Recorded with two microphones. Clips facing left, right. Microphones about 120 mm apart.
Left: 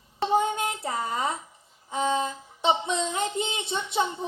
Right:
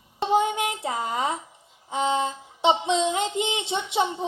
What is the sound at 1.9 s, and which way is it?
Music, 20° right (ahead or behind).